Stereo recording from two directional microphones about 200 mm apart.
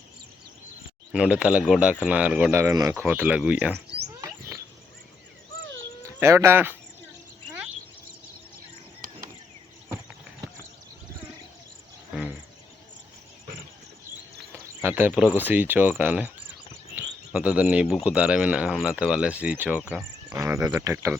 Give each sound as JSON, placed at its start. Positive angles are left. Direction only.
{"t": 1.1, "sound": "speech", "side_deg": -5}
{"t": 4.2, "sound": "rodents", "side_deg": -15}
{"t": 6.1, "sound": "speech", "side_deg": -15}
{"t": 14.8, "sound": "speech", "side_deg": -10}